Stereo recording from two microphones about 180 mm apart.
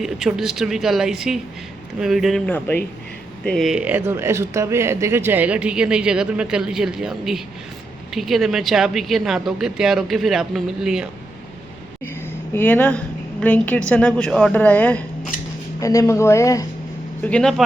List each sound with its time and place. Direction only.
0.0 s speech: centre (ahead or behind)
12.5 s a woman's voice: 10° left (ahead or behind)